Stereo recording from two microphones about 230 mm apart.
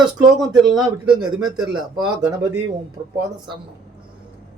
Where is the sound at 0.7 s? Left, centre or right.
Centre.